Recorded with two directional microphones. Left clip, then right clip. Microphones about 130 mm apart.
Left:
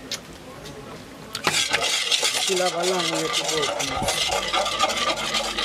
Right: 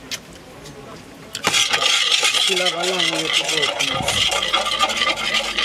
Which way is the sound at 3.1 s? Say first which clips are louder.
Right 5 dB; 15° right (ahead or behind).